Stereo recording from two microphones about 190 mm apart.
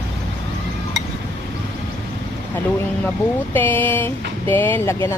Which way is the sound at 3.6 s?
10° left (ahead or behind).